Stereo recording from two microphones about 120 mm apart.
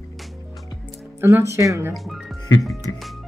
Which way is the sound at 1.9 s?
Centre (ahead or behind).